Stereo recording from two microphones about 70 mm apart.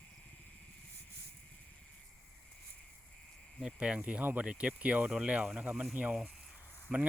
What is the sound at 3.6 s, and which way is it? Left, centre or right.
Speech, centre.